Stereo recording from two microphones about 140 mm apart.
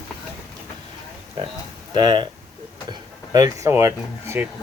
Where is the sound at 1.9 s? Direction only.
35° right (ahead or behind).